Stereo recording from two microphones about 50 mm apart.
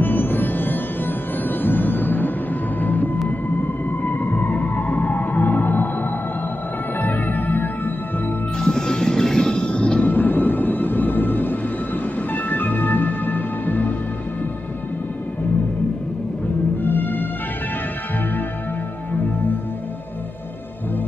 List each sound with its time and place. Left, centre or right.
0.0 s music: left
8.5 s music: centre
10.1 s music: left
16.8 s music: left